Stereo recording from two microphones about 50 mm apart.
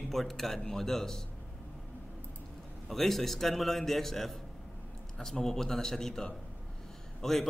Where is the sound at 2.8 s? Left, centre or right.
Centre.